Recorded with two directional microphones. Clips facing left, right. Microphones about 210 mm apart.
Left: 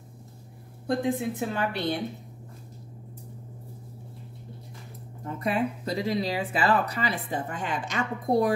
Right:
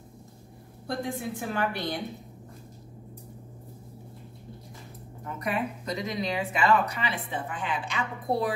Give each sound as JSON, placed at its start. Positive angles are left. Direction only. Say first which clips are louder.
{"t": 0.8, "sound": "a woman's voice", "louder": "left 5 dB", "side_deg": 20}
{"t": 5.2, "sound": "speech", "louder": "left 3 dB", "side_deg": 30}